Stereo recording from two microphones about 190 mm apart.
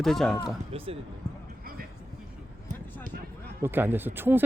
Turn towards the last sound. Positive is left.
turn(degrees=-10)  # may be behind; listen again after turning